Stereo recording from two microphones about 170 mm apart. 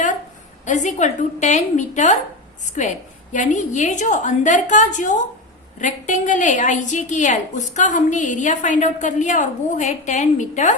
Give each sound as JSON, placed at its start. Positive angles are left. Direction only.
{"t": 0.6, "sound": "a woman's voice", "side_deg": 45}
{"t": 3.3, "sound": "a woman's voice", "side_deg": 45}